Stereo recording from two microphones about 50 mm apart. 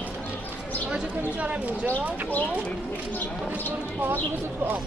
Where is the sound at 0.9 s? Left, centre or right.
Right.